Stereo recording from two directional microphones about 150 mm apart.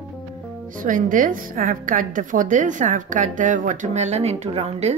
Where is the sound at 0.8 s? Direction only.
60° right (ahead or behind).